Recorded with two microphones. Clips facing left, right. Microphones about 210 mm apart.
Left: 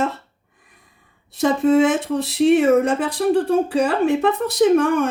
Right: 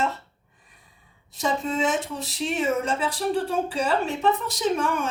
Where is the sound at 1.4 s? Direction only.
55° left (ahead or behind).